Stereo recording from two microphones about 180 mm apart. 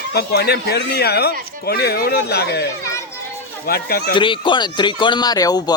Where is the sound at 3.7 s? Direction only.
60° left (ahead or behind).